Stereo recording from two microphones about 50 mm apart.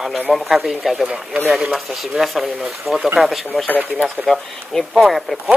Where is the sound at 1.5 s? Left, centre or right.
Centre.